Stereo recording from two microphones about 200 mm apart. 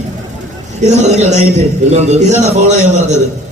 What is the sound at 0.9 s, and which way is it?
A man's voice, 35° right (ahead or behind).